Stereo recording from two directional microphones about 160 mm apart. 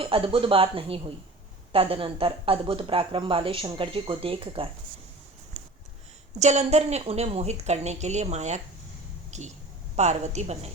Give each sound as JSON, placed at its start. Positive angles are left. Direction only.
{"t": 0.0, "sound": "speech", "side_deg": -35}
{"t": 6.4, "sound": "a woman's voice", "side_deg": -45}